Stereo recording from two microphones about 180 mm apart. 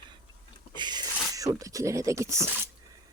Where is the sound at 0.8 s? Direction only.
25° right (ahead or behind).